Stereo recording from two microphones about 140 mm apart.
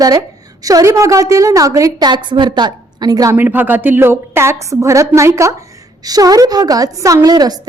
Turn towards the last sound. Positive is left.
turn(degrees=-30)  # may be behind; listen again after turning